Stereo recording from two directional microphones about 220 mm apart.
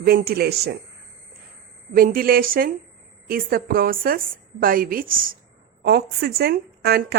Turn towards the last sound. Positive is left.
turn(degrees=-45)  # may be behind; listen again after turning